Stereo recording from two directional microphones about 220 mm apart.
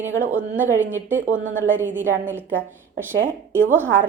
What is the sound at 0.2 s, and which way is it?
A woman's voice, 10° right (ahead or behind).